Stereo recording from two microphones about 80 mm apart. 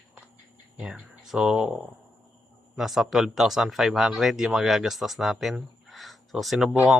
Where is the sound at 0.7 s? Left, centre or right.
Centre.